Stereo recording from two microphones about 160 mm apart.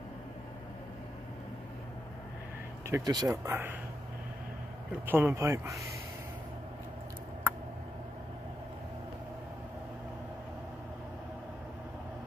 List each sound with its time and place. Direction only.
2.9 s speech: 20° right (ahead or behind)
5.0 s speech: 10° right (ahead or behind)